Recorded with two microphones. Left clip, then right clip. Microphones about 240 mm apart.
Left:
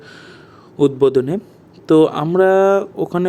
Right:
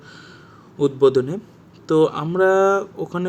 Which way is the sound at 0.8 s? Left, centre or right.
Centre.